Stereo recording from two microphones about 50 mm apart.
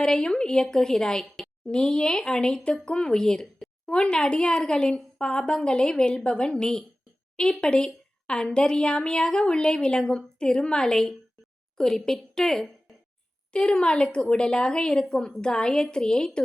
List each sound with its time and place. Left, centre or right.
0.0 s a woman's voice: centre
13.5 s a woman's voice: centre